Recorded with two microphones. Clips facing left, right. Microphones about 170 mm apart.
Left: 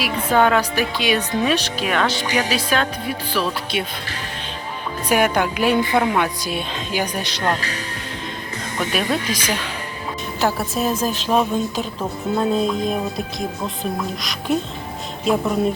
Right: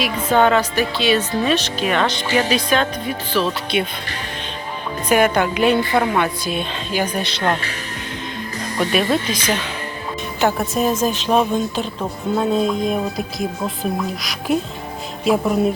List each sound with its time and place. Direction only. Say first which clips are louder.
0.0 s speech: right 1 dB; 5° left (ahead or behind)
3.7 s speech: right 5 dB; 55° right (ahead or behind)
5.0 s speech: right 2 dB; 10° left (ahead or behind)
8.9 s a woman's voice: right 3 dB; centre (ahead or behind)
14.2 s a woman's voice: right 1 dB; centre (ahead or behind)